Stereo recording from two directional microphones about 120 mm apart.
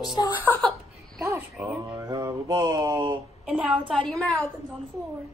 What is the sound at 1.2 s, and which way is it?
Speech, 25° right (ahead or behind).